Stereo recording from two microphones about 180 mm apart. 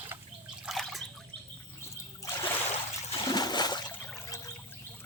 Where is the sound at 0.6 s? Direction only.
Centre (ahead or behind).